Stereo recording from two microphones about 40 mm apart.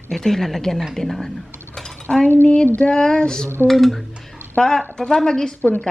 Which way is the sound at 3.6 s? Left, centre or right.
Centre.